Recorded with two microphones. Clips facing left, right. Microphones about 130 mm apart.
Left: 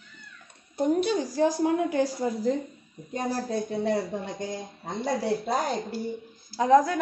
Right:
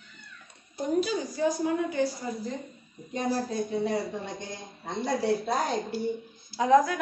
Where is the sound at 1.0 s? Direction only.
85° left.